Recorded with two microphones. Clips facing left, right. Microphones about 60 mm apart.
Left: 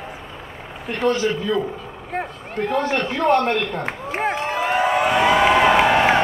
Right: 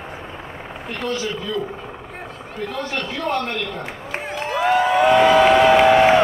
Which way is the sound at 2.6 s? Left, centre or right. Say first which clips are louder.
Left 5 dB; left.